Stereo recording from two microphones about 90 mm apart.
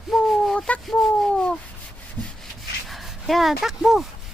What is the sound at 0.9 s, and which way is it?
Speech, 5° left (ahead or behind).